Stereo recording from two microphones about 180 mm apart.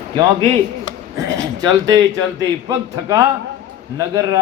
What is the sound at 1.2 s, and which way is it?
A man's voice, 20° right (ahead or behind).